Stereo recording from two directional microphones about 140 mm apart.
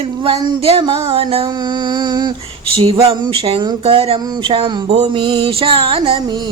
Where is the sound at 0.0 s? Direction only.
40° right (ahead or behind).